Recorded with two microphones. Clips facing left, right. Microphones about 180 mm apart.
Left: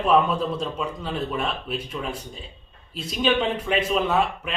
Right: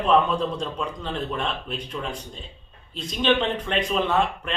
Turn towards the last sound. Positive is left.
turn(degrees=5)  # may be behind; listen again after turning